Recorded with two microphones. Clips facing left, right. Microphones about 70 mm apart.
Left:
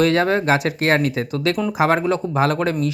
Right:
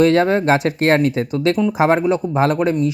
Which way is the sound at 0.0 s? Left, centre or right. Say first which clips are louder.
Right 3 dB; right.